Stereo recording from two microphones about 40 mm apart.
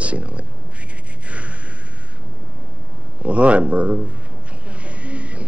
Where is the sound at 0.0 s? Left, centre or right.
Right.